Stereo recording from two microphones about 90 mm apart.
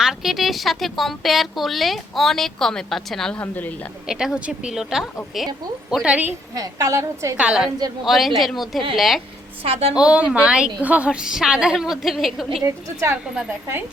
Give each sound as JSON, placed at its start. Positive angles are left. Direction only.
{"t": 0.0, "sound": "speech", "side_deg": -5}
{"t": 3.4, "sound": "a woman's voice", "side_deg": 20}
{"t": 4.1, "sound": "speech", "side_deg": -5}
{"t": 6.1, "sound": "a woman's voice", "side_deg": -15}
{"t": 6.5, "sound": "a woman's voice", "side_deg": -40}
{"t": 7.3, "sound": "a woman's voice", "side_deg": -10}
{"t": 9.6, "sound": "a woman's voice", "side_deg": -90}
{"t": 9.9, "sound": "a woman's voice", "side_deg": -10}
{"t": 12.6, "sound": "a woman's voice", "side_deg": -35}